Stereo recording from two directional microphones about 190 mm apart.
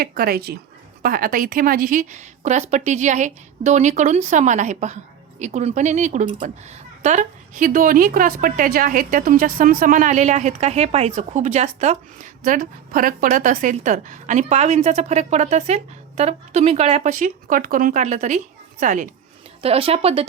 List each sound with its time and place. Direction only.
0.0 s a woman's voice: 55° right (ahead or behind)
19.6 s a woman's voice: 30° right (ahead or behind)